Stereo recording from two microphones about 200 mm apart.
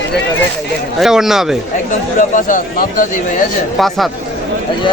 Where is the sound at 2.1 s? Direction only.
40° left (ahead or behind).